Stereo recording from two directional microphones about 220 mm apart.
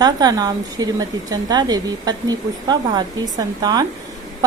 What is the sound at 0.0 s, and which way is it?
A woman's voice, 15° right (ahead or behind).